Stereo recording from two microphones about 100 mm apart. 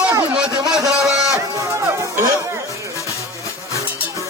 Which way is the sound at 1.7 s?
30° right (ahead or behind).